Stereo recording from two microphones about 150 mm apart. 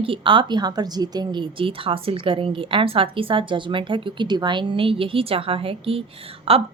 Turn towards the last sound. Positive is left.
turn(degrees=-40)  # may be behind; listen again after turning